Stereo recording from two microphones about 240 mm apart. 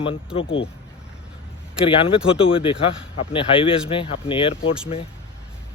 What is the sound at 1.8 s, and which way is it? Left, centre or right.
Speech, left.